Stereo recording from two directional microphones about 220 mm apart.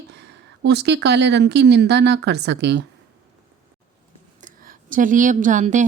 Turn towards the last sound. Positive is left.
turn(degrees=-35)  # may be behind; listen again after turning